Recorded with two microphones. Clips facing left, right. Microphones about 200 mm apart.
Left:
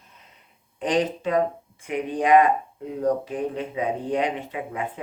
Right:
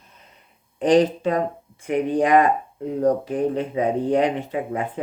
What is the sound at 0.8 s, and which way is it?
Speech, 35° right (ahead or behind).